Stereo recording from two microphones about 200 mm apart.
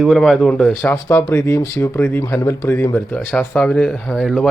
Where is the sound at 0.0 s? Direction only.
Centre (ahead or behind).